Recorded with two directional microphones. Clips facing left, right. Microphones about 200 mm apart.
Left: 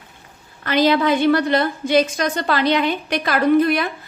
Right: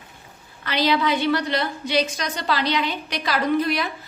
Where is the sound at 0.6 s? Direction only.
50° left (ahead or behind).